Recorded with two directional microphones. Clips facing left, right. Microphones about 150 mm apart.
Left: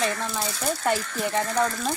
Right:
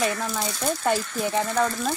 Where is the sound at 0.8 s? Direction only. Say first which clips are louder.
Right 1 dB; 10° right (ahead or behind).